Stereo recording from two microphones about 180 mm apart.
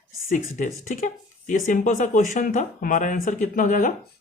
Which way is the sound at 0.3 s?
45° left (ahead or behind).